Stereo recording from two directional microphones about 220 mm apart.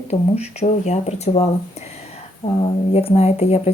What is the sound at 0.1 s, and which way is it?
Speech, 30° left (ahead or behind).